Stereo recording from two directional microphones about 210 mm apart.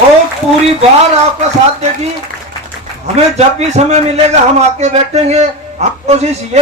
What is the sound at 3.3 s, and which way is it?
A man's voice, 30° right (ahead or behind).